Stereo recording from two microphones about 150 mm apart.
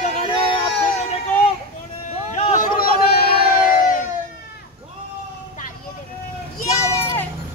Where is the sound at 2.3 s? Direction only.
45° left (ahead or behind).